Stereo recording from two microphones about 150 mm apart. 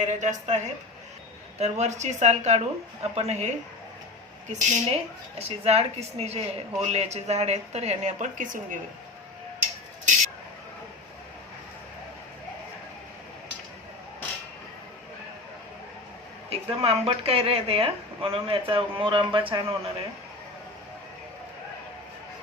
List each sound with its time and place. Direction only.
0.0 s a woman's voice: 55° right (ahead or behind)
5.4 s a woman's voice: 45° right (ahead or behind); by 8.8 s 60° right (ahead or behind)
16.5 s a woman's voice: 40° right (ahead or behind)